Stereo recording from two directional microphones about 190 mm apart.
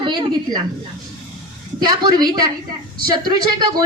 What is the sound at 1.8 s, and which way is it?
A woman's voice, 25° right (ahead or behind).